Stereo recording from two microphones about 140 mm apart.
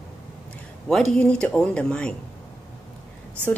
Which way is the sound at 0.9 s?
5° left (ahead or behind).